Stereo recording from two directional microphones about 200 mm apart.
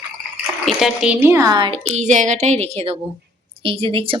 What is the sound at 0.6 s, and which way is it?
A woman's voice, centre (ahead or behind).